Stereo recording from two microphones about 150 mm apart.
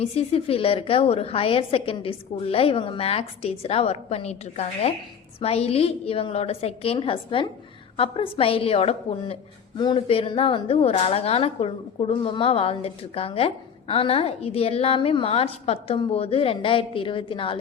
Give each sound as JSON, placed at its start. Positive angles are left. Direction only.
{"t": 0.0, "sound": "a woman's voice", "side_deg": 40}